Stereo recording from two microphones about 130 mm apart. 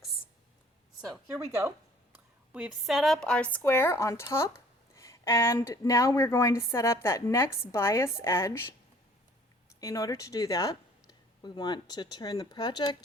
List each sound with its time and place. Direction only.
2.5 s speech: 5° right (ahead or behind); by 8.6 s 20° left (ahead or behind)
9.8 s speech: 25° left (ahead or behind)